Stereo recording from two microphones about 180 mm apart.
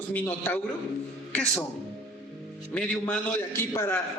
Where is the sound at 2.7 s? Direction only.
5° left (ahead or behind).